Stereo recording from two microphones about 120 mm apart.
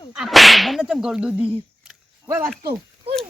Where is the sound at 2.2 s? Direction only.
25° right (ahead or behind).